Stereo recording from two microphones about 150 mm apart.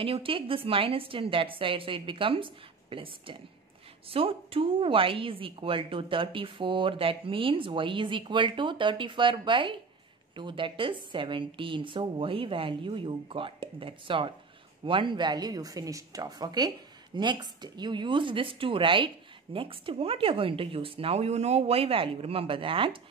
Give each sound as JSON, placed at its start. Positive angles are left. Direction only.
{"t": 0.0, "sound": "speech", "side_deg": -35}